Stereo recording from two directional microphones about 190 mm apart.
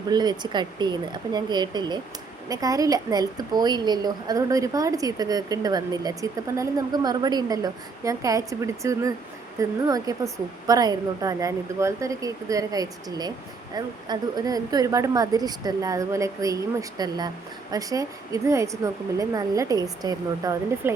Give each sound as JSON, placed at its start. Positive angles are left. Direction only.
{"t": 0.1, "sound": "a woman's voice", "side_deg": -20}